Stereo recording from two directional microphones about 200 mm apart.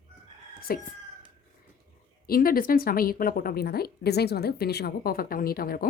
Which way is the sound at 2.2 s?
45° left (ahead or behind).